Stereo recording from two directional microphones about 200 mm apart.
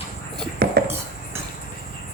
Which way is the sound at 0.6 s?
50° right (ahead or behind).